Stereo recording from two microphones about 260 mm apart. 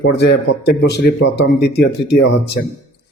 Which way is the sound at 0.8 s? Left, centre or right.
Left.